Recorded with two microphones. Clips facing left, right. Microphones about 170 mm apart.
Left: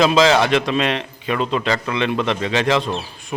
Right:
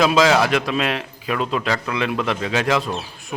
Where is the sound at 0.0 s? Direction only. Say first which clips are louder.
Left 1 dB; 5° right (ahead or behind).